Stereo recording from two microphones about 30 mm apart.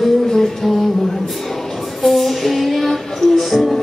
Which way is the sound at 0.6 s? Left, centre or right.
Centre.